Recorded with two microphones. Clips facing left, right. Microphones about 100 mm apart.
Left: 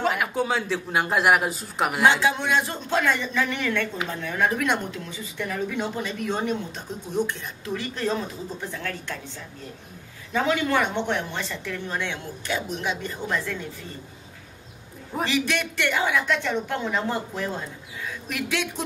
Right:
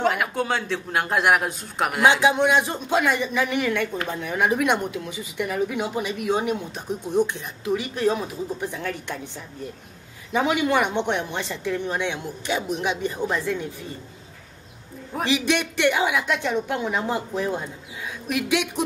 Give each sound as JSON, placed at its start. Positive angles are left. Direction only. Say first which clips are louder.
{"t": 0.0, "sound": "speech", "louder": "right 1 dB", "side_deg": 0}
{"t": 2.0, "sound": "speech", "louder": "right 4 dB", "side_deg": -15}
{"t": 10.3, "sound": "speech", "louder": "right 2 dB", "side_deg": -15}
{"t": 15.2, "sound": "speech", "louder": "right 3 dB", "side_deg": -20}